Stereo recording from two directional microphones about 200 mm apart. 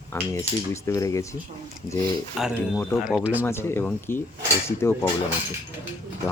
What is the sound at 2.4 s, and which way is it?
Speech, centre (ahead or behind).